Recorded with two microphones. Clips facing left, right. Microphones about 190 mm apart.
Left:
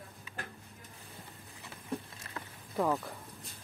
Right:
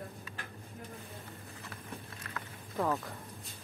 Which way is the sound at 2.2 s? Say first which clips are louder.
Even; 25° left (ahead or behind).